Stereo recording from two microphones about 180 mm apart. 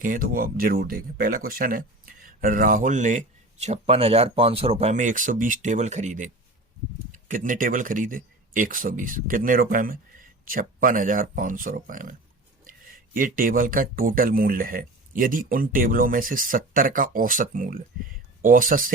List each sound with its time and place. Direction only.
0.0 s speech: 50° right (ahead or behind)